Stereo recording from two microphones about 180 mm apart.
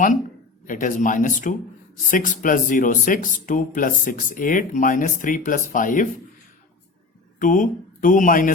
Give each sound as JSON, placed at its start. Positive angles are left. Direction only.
{"t": 0.7, "sound": "speech", "side_deg": 45}
{"t": 7.3, "sound": "speech", "side_deg": 45}